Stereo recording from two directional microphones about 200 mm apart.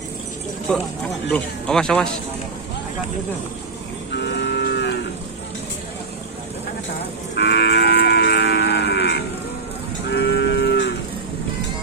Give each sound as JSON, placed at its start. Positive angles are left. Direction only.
{"t": 1.3, "sound": "speech", "side_deg": 5}
{"t": 4.1, "sound": "moo", "side_deg": 60}
{"t": 7.3, "sound": "moo", "side_deg": 55}
{"t": 10.1, "sound": "cattle", "side_deg": 60}